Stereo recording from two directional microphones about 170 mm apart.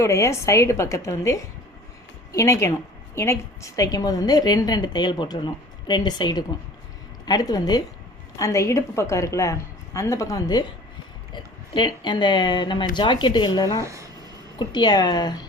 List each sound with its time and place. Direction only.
0.0 s a woman's voice: 15° left (ahead or behind)
11.7 s a woman's voice: 25° left (ahead or behind)
13.8 s speech: 20° right (ahead or behind)
14.6 s a woman's voice: 25° left (ahead or behind)